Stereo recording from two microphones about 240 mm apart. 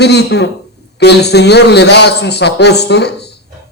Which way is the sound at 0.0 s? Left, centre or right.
Left.